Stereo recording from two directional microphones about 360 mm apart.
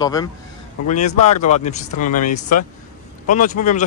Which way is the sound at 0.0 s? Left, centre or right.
Centre.